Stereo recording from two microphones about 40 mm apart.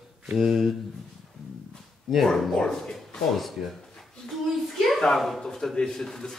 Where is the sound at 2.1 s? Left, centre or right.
Centre.